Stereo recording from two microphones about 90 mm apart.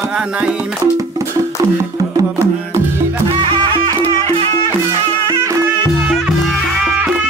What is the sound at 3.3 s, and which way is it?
Music, 60° right (ahead or behind).